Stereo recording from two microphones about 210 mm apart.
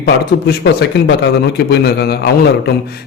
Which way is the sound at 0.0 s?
55° left (ahead or behind).